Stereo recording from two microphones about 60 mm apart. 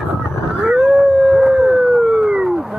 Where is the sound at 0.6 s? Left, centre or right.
Centre.